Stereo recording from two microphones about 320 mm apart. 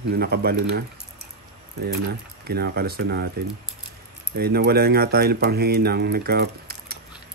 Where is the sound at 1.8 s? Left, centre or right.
Right.